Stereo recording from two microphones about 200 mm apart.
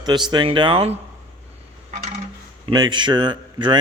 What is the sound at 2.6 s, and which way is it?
Speech, 20° right (ahead or behind).